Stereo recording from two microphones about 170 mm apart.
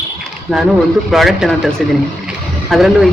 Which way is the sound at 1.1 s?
Centre (ahead or behind).